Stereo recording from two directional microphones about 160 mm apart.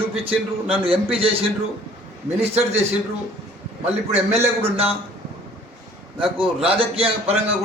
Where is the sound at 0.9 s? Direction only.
35° right (ahead or behind).